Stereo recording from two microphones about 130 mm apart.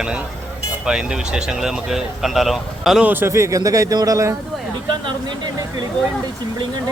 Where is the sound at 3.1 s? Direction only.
15° right (ahead or behind).